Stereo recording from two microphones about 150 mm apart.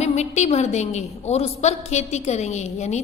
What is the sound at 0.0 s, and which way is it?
A woman's voice, 50° left (ahead or behind).